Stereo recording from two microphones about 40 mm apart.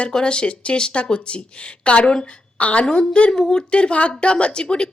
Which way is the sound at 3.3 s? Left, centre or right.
Centre.